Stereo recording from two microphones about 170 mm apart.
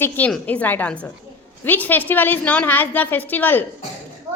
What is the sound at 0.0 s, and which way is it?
A woman's voice, 10° left (ahead or behind).